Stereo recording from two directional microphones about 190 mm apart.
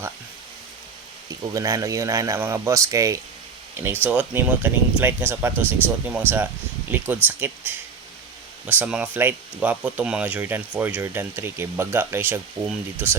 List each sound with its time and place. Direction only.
1.3 s speech: 15° right (ahead or behind)